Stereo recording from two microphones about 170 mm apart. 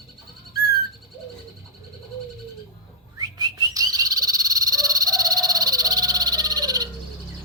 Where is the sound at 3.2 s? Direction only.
20° right (ahead or behind).